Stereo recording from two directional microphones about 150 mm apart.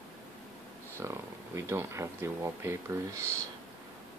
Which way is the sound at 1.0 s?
20° right (ahead or behind).